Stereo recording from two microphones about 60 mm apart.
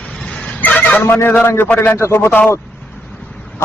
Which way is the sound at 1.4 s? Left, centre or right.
Left.